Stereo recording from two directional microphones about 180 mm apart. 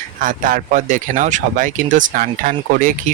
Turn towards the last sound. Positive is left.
turn(degrees=-50)  # may be behind; listen again after turning